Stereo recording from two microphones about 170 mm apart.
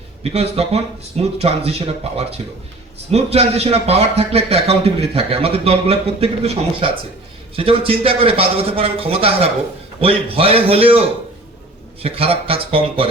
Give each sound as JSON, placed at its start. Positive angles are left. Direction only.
{"t": 0.2, "sound": "a man's voice", "side_deg": -40}